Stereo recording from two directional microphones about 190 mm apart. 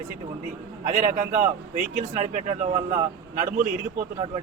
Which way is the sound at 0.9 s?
45° right (ahead or behind).